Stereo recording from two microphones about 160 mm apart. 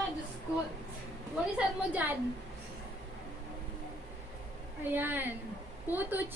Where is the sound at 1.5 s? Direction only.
10° right (ahead or behind).